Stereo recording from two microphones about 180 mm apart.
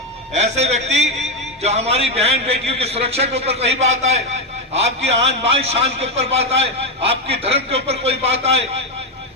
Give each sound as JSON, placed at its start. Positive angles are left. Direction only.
{"t": 0.3, "sound": "a man's voice", "side_deg": -40}